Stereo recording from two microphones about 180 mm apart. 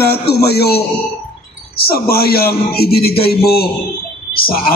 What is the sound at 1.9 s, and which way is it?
A man's voice, 55° left (ahead or behind).